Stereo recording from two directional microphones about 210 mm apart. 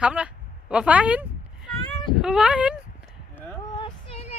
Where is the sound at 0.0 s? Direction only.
5° right (ahead or behind).